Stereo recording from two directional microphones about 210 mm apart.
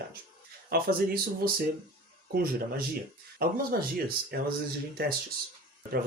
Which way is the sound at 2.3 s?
45° right (ahead or behind).